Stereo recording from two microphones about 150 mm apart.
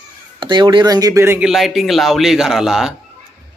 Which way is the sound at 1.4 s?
Centre (ahead or behind).